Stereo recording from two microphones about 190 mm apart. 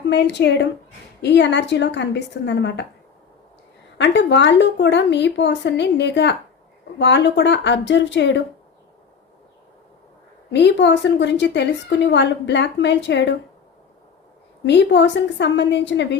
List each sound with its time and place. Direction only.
0.1 s a woman's voice: 65° left (ahead or behind)
3.9 s a woman's voice: 70° left (ahead or behind)
10.5 s a woman's voice: 65° left (ahead or behind)
14.6 s a woman's voice: 70° left (ahead or behind)